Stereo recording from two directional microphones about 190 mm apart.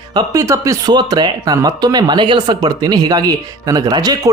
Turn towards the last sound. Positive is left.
turn(degrees=-20)  # may be behind; listen again after turning